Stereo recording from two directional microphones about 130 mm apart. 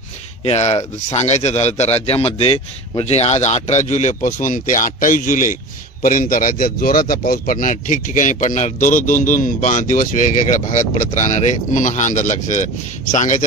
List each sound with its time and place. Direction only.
0.5 s speech: 55° left (ahead or behind)